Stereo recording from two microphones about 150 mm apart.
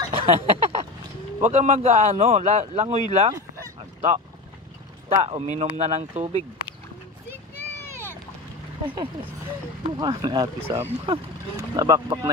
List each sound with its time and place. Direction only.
0.3 s a sound: 45° right (ahead or behind)
1.4 s a man's voice: 50° right (ahead or behind)
5.1 s a man's voice: 45° right (ahead or behind)
8.8 s speech: 35° right (ahead or behind)